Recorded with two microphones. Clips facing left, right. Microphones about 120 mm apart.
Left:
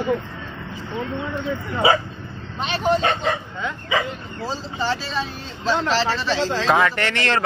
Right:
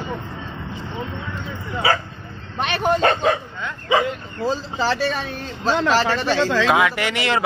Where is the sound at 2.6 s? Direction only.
55° right (ahead or behind).